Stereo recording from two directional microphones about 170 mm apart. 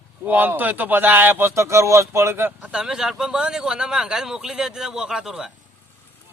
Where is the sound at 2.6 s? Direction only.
5° right (ahead or behind).